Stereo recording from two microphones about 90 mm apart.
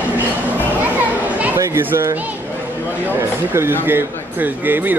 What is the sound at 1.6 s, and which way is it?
A man's voice, 30° right (ahead or behind).